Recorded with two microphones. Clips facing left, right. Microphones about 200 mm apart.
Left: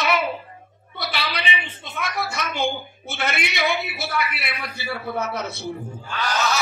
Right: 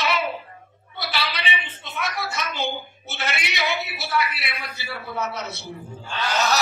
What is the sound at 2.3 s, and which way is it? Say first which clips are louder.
A woman's voice: left 3 dB; 50° left (ahead or behind).